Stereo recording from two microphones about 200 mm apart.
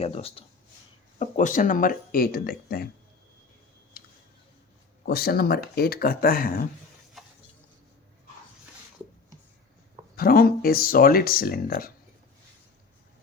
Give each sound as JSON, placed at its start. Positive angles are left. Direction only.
{"t": 0.0, "sound": "speech", "side_deg": 30}
{"t": 5.0, "sound": "speech", "side_deg": 50}
{"t": 7.2, "sound": "a sound", "side_deg": 0}
{"t": 10.2, "sound": "speech", "side_deg": 45}